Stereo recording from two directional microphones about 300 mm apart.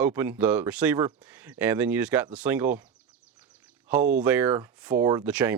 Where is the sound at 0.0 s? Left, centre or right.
Centre.